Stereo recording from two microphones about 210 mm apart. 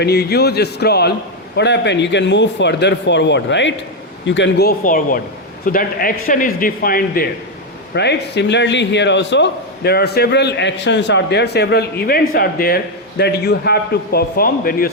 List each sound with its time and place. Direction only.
0.0 s a man's voice: 50° left (ahead or behind)